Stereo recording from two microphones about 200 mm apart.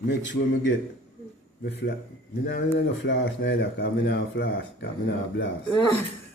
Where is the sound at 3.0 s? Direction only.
60° left (ahead or behind).